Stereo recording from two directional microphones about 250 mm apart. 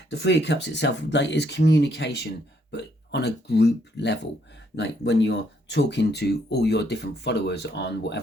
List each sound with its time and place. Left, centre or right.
0.1 s speech: left